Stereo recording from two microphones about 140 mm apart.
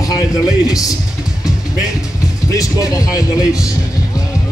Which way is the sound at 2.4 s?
25° left (ahead or behind).